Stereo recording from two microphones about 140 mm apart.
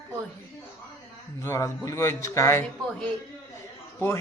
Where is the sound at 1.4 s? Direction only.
20° left (ahead or behind).